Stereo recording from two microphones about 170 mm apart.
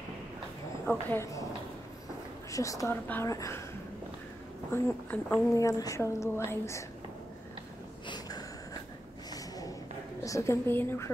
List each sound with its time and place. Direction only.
0.8 s a woman's voice: 10° left (ahead or behind)
2.5 s a woman's voice: 20° left (ahead or behind)
4.8 s a woman's voice: 15° left (ahead or behind)
8.1 s a sound: 25° left (ahead or behind)
10.2 s a woman's voice: 20° left (ahead or behind)